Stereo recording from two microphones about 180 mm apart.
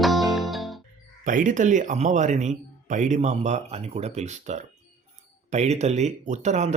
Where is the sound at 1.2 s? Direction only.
45° right (ahead or behind).